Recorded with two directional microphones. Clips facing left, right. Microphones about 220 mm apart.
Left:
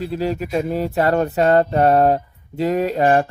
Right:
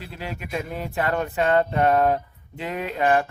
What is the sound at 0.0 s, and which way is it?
Speech, 40° left (ahead or behind).